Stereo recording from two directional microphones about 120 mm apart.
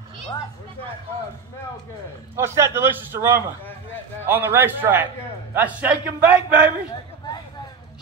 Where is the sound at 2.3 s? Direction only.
20° right (ahead or behind).